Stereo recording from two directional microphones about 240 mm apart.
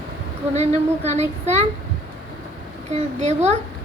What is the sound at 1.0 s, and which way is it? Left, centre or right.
Speech, right.